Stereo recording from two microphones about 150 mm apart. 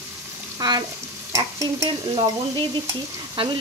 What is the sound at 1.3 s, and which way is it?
Stir, 20° right (ahead or behind).